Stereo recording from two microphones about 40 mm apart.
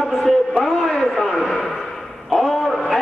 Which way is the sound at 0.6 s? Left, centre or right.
Centre.